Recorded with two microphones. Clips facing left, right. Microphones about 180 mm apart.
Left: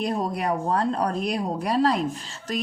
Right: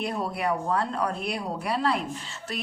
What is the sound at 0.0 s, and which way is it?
Speech, 35° left (ahead or behind).